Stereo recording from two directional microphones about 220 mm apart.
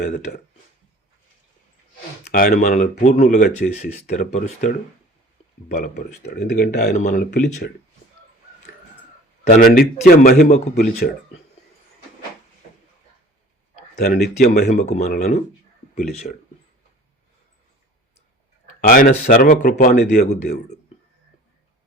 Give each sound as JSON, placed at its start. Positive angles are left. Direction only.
{"t": 0.3, "sound": "speech", "side_deg": 35}
{"t": 2.3, "sound": "speech", "side_deg": 40}
{"t": 9.5, "sound": "speech", "side_deg": 40}
{"t": 14.0, "sound": "speech", "side_deg": 45}
{"t": 18.9, "sound": "speech", "side_deg": 40}